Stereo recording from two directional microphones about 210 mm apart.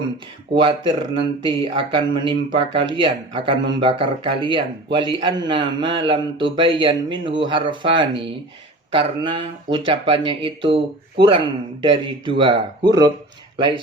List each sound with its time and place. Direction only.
0.6 s a man's voice: 25° right (ahead or behind)